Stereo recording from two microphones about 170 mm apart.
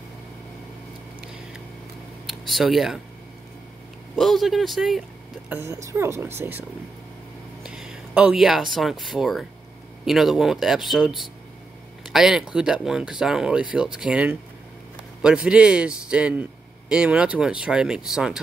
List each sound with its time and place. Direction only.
2.2 s speech: centre (ahead or behind)
4.2 s speech: centre (ahead or behind)
5.5 s speech: 15° right (ahead or behind)
7.6 s speech: 5° right (ahead or behind)